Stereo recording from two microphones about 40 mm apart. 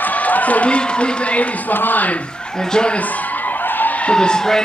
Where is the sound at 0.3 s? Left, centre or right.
Left.